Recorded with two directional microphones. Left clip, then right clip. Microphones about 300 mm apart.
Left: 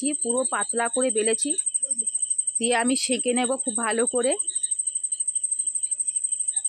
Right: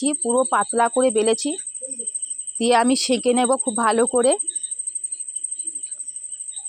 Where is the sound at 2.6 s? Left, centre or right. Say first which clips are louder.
Right 7 dB; centre.